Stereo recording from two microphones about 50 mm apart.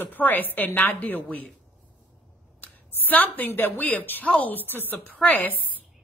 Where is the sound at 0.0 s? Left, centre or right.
Left.